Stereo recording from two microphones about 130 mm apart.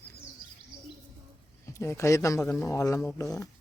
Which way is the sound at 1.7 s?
20° left (ahead or behind).